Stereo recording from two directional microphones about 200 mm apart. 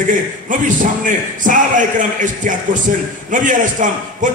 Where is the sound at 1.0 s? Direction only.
40° right (ahead or behind).